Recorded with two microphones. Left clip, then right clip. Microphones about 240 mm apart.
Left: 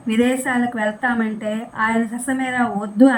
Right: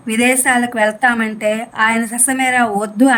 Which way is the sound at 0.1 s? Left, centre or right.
Right.